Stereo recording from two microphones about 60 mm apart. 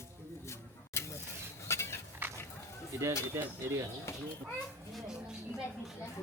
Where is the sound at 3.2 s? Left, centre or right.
Right.